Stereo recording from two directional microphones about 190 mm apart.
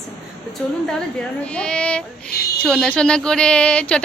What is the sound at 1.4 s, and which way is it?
Speech, 5° left (ahead or behind).